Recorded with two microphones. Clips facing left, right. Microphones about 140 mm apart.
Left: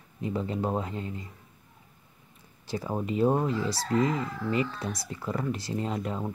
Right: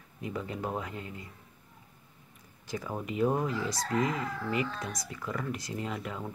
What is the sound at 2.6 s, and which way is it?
Crowing, 30° left (ahead or behind).